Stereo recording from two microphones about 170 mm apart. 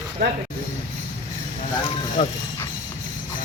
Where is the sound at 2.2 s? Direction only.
35° left (ahead or behind).